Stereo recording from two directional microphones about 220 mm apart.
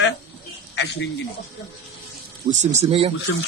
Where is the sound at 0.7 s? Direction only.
50° left (ahead or behind).